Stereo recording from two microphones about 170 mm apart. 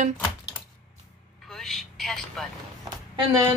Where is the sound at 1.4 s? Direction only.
Centre (ahead or behind).